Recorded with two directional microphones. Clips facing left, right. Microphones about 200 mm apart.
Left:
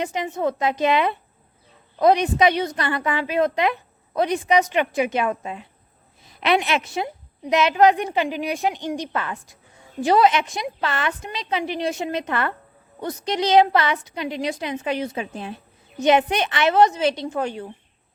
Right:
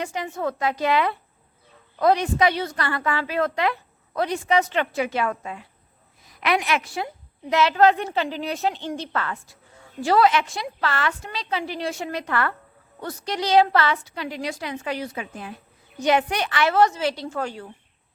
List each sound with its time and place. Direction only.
0.0 s a woman's voice: 20° left (ahead or behind)